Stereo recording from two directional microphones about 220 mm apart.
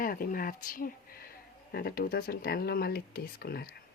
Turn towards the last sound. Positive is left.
turn(degrees=45)  # may be behind; listen again after turning